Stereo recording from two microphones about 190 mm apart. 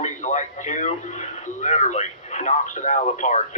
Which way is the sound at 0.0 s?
40° left (ahead or behind).